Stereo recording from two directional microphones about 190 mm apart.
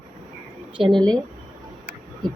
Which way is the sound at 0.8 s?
25° right (ahead or behind).